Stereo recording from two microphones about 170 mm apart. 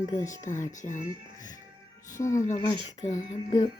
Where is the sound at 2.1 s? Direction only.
20° left (ahead or behind).